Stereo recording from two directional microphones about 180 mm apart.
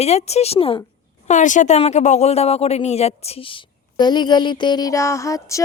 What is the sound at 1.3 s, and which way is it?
A woman's voice, 45° left (ahead or behind).